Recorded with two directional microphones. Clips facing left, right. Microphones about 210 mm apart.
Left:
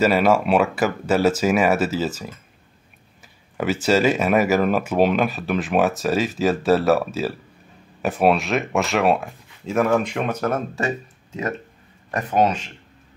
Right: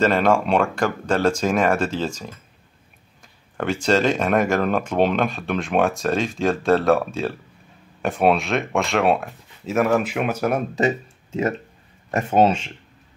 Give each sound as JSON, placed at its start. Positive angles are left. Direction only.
{"t": 0.0, "sound": "speech", "side_deg": 5}
{"t": 3.5, "sound": "speech", "side_deg": 5}
{"t": 12.1, "sound": "speech", "side_deg": -25}